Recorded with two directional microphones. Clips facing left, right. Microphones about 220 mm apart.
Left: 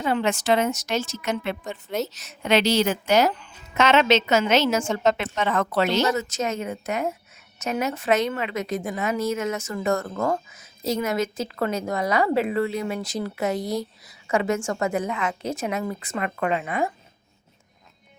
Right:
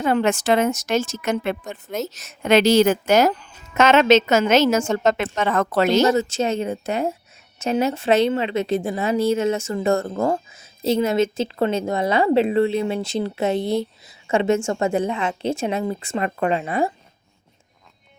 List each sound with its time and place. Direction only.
0.0 s a woman's voice: 50° right (ahead or behind)
6.1 s a woman's voice: 30° right (ahead or behind)